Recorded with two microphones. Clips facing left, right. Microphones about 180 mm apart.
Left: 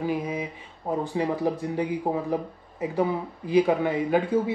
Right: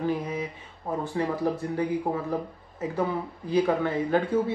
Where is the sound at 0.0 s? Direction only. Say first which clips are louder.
Left 1 dB; 10° left (ahead or behind).